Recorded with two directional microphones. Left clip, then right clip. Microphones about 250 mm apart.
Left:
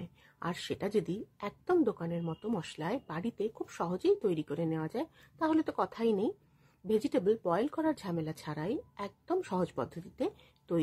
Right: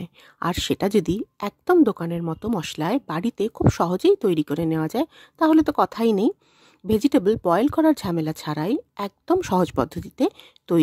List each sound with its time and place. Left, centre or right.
0.0 s a woman's voice: right